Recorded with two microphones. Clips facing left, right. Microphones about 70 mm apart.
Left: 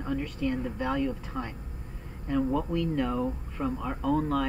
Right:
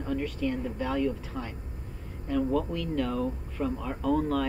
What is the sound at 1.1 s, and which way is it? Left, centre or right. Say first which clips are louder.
Speech: right 1 dB; centre.